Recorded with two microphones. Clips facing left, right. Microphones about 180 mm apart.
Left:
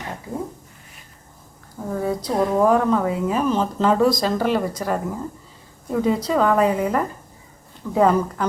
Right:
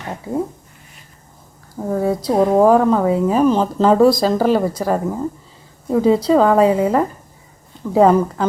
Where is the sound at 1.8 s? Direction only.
40° right (ahead or behind).